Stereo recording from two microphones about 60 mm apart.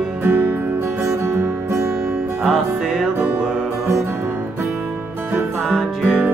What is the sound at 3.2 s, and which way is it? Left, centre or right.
Music, right.